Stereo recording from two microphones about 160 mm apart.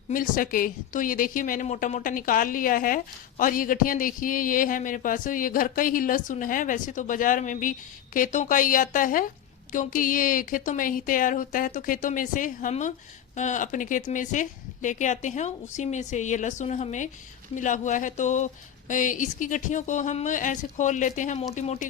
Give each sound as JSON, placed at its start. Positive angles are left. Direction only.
{"t": 0.1, "sound": "a woman's voice", "side_deg": 60}